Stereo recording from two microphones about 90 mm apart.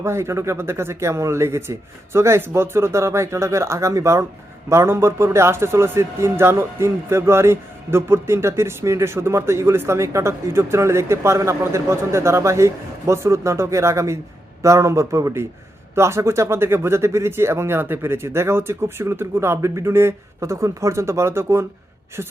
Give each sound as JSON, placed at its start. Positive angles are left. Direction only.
{"t": 0.0, "sound": "a man's voice", "side_deg": -30}